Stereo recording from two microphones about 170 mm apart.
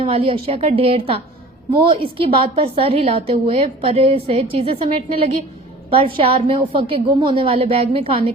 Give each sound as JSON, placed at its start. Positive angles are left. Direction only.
{"t": 0.0, "sound": "a woman's voice", "side_deg": -30}